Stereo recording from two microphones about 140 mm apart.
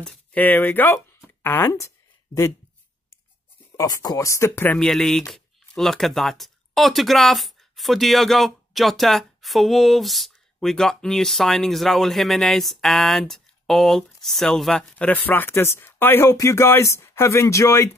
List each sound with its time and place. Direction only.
0.0 s speech: 5° left (ahead or behind)
3.7 s speech: 25° left (ahead or behind)
4.7 s speech: 5° left (ahead or behind); by 17.9 s 20° left (ahead or behind)